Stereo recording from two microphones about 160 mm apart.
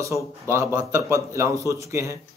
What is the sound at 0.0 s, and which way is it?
A man's voice, 20° right (ahead or behind).